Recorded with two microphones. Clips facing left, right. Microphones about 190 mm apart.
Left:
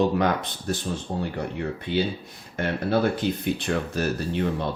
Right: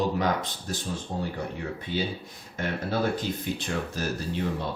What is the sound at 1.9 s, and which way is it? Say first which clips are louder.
Speech: left 6 dB; 65° left (ahead or behind).